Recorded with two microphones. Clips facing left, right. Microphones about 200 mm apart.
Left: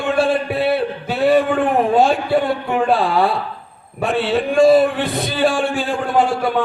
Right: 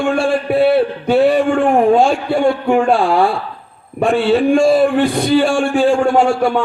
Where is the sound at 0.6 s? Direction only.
55° right (ahead or behind).